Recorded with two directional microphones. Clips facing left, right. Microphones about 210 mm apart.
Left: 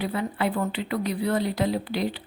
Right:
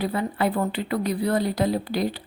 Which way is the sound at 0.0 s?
40° right (ahead or behind).